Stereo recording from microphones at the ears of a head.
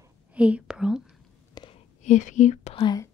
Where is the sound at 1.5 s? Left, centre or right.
Left.